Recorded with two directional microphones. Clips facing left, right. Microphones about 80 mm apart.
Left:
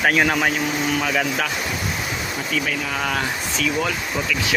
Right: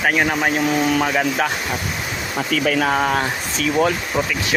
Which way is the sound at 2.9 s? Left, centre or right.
Right.